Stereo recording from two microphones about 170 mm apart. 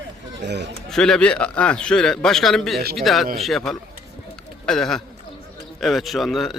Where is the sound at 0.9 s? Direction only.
5° left (ahead or behind).